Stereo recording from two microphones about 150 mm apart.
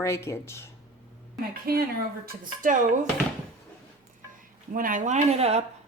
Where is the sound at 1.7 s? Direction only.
90° right.